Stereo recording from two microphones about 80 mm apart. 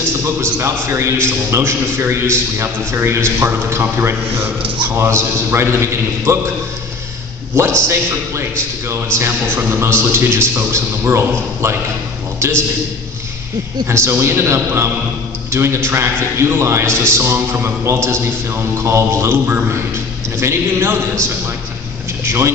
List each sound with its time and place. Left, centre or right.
0.4 s a man's voice: right
7.5 s a man's voice: right
13.8 s a man's voice: right